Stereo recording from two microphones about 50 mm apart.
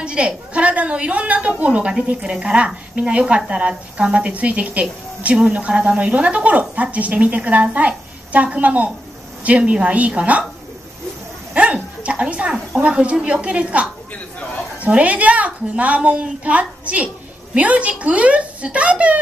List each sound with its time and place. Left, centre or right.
0.0 s speech: right
11.5 s speech: right
14.9 s speech: right